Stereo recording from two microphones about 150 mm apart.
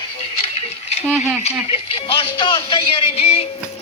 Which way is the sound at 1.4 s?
40° left (ahead or behind).